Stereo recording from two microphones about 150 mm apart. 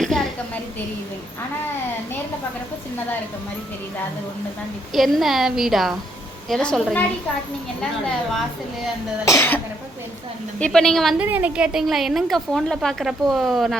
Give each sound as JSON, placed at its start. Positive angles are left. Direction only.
{"t": 0.0, "sound": "a sound", "side_deg": 5}
{"t": 4.9, "sound": "a woman's voice", "side_deg": 0}
{"t": 9.2, "sound": "speech", "side_deg": 20}
{"t": 10.6, "sound": "a woman's voice", "side_deg": 5}
{"t": 11.2, "sound": "a woman's voice", "side_deg": -10}